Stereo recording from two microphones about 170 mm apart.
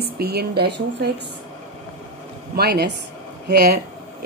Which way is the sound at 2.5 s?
70° right (ahead or behind).